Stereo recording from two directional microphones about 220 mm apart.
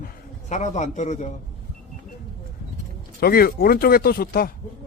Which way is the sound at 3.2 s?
45° left (ahead or behind).